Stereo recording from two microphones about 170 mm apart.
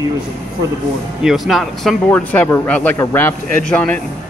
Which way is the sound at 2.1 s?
10° left (ahead or behind).